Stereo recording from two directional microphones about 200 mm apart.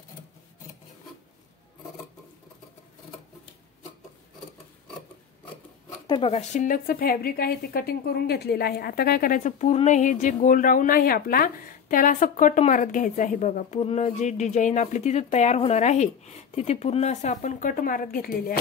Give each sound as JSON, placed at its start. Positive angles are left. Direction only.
{"t": 6.0, "sound": "speech", "side_deg": 25}